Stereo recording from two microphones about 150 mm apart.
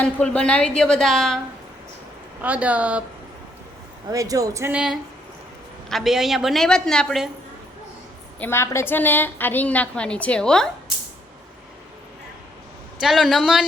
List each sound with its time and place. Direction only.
0.0 s a woman's voice: 5° left (ahead or behind)
2.4 s a woman's voice: 10° right (ahead or behind)
4.1 s speech: 25° right (ahead or behind)
4.7 s a woman's voice: 5° right (ahead or behind)
8.4 s a woman's voice: 15° left (ahead or behind)
13.0 s a woman's voice: centre (ahead or behind)